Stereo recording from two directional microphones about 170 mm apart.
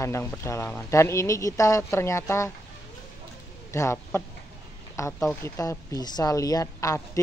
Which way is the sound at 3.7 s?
15° left (ahead or behind).